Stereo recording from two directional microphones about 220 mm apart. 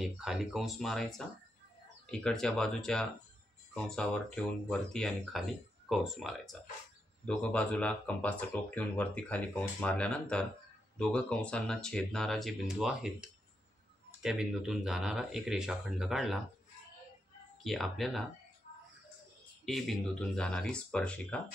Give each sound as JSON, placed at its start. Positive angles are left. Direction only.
{"t": 0.0, "sound": "speech", "side_deg": 0}
{"t": 17.6, "sound": "speech", "side_deg": 0}
{"t": 19.6, "sound": "speech", "side_deg": 0}